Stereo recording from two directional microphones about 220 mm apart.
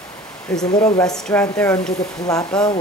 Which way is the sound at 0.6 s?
15° left (ahead or behind).